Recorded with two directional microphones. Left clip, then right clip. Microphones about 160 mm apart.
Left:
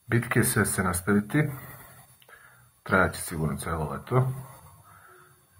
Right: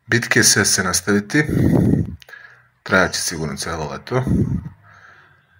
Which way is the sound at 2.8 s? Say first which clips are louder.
Right 8 dB; 30° right (ahead or behind).